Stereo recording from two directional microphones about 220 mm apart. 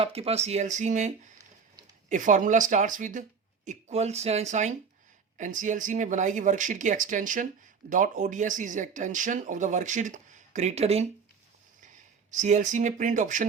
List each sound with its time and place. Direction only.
0.0 s speech: 25° right (ahead or behind)
12.3 s speech: 35° right (ahead or behind)